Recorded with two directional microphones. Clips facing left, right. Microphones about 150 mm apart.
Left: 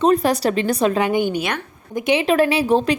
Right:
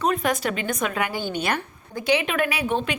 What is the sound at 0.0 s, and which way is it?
A woman's voice, 35° left (ahead or behind).